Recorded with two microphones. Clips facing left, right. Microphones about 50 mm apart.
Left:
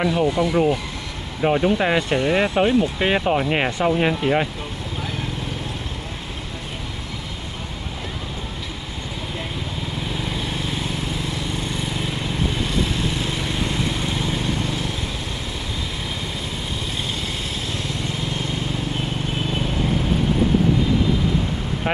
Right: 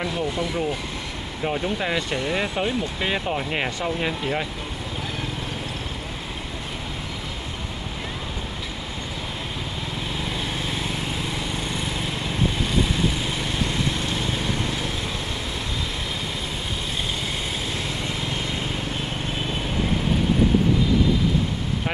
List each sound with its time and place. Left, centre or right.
0.2 s speech: left
10.3 s vehicle: centre
12.8 s vehicle: centre
13.6 s vehicle: centre